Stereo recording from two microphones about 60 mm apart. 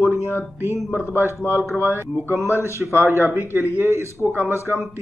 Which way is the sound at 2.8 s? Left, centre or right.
Right.